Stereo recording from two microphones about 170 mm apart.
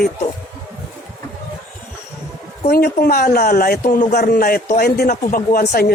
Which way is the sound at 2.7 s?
65° left (ahead or behind).